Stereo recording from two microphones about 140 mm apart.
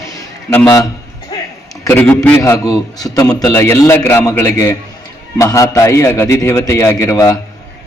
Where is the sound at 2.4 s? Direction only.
25° left (ahead or behind).